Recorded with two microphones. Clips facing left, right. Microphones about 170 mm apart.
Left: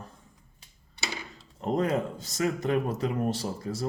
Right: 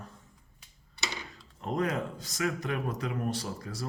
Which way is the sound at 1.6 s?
30° left (ahead or behind).